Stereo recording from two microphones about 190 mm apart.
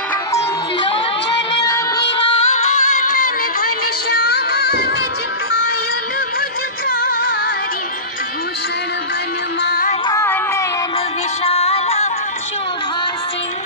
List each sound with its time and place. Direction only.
2.2 s music: 35° left (ahead or behind)
4.1 s music: 55° left (ahead or behind)
6.9 s music: 50° left (ahead or behind)
9.6 s music: 55° left (ahead or behind)
10.0 s a sound: 15° left (ahead or behind)
11.4 s music: 30° left (ahead or behind)